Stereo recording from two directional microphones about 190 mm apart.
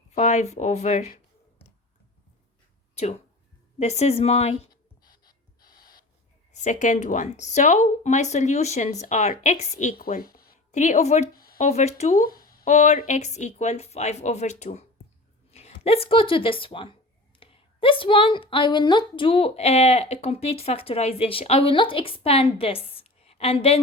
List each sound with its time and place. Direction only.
0.1 s speech: 40° left (ahead or behind)
2.9 s a sound: 35° left (ahead or behind)
3.8 s speech: 35° left (ahead or behind)
5.0 s gasp: 50° left (ahead or behind)
6.5 s speech: 40° left (ahead or behind)
10.1 s a sound: 50° left (ahead or behind)
10.7 s speech: 40° left (ahead or behind)
12.1 s a sound: 50° left (ahead or behind)
12.7 s a woman's voice: 35° left (ahead or behind)